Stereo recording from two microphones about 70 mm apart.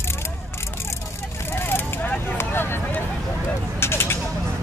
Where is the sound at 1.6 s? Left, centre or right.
Left.